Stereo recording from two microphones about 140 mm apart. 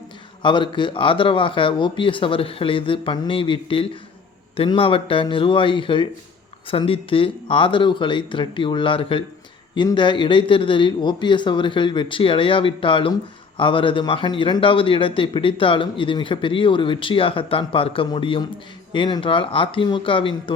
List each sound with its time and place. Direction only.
0.4 s a man's voice: 35° left (ahead or behind)